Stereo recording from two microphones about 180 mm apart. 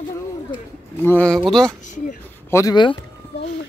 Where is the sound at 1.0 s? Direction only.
10° left (ahead or behind).